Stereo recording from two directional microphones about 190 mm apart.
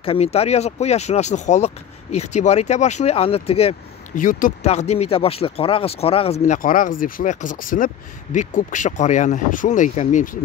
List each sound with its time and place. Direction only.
0.0 s speech: 30° left (ahead or behind)
4.1 s speech: 45° left (ahead or behind)